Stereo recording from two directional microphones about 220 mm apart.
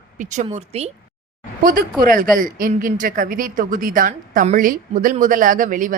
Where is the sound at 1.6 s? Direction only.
40° right (ahead or behind).